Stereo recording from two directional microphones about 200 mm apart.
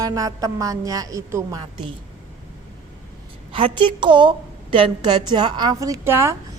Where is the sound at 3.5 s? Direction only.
25° right (ahead or behind).